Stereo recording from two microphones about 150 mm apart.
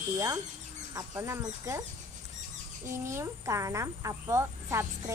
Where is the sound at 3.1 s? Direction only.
20° right (ahead or behind).